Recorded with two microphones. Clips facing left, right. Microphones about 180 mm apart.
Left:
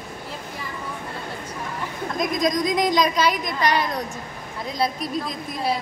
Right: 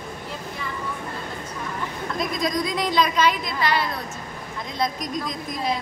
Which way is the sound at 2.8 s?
15° left (ahead or behind).